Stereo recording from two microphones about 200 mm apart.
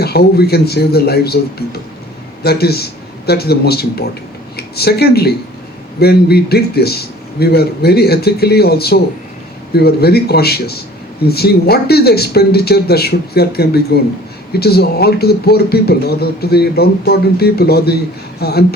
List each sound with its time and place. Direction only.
0.0 s speech: 50° left (ahead or behind)